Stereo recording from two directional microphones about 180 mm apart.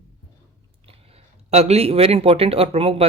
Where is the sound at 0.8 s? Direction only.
35° right (ahead or behind).